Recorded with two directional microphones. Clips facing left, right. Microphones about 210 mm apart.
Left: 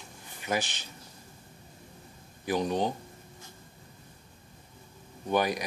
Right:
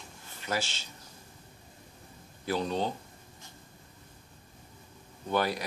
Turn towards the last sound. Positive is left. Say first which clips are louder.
# left 2 dB
turn(degrees=15)  # may be behind; listen again after turning